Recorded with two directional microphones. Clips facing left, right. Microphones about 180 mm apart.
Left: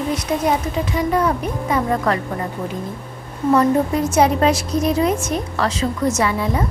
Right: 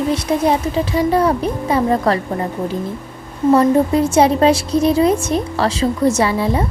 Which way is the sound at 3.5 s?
30° right (ahead or behind).